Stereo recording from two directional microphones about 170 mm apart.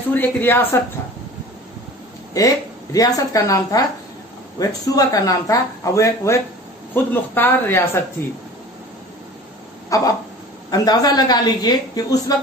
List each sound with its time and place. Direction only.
0.1 s speech: 10° left (ahead or behind)
2.3 s speech: 20° left (ahead or behind)
9.8 s a sound: 20° left (ahead or behind)
10.7 s speech: 20° left (ahead or behind)